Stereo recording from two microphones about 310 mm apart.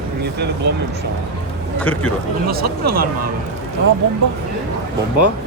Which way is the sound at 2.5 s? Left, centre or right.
Right.